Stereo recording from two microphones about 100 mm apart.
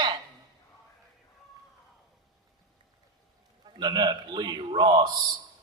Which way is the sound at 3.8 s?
40° right (ahead or behind).